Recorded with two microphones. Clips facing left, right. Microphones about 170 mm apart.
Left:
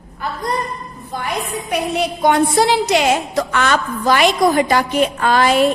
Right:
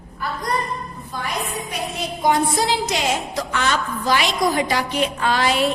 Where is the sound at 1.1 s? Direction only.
60° left (ahead or behind).